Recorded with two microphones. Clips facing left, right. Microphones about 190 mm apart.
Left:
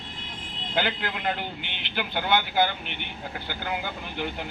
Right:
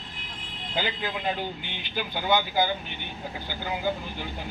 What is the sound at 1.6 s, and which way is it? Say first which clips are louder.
A man's voice: even; 65° left (ahead or behind).